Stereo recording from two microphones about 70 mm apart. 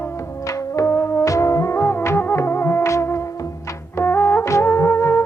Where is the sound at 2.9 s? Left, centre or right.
Left.